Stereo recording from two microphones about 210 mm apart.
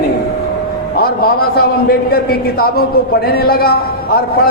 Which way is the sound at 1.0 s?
45° left (ahead or behind).